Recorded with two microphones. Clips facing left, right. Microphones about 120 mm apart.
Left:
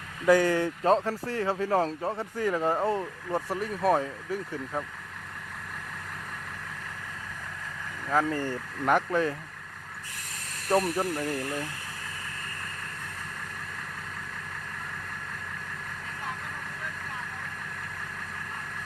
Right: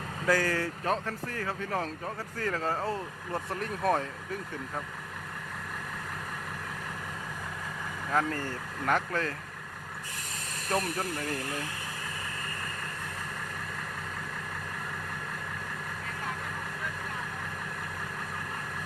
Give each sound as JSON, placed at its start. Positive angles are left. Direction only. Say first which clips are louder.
{"t": 0.3, "sound": "speech", "louder": "left 6 dB", "side_deg": 20}
{"t": 0.9, "sound": "speech", "louder": "left 9 dB", "side_deg": 30}
{"t": 2.4, "sound": "speech", "louder": "left 5 dB", "side_deg": 15}
{"t": 3.5, "sound": "speech", "louder": "left 3 dB", "side_deg": 5}
{"t": 8.1, "sound": "speech", "louder": "left 3 dB", "side_deg": 5}
{"t": 8.4, "sound": "speech", "louder": "left 4 dB", "side_deg": 15}
{"t": 10.7, "sound": "speech", "louder": "left 6 dB", "side_deg": 20}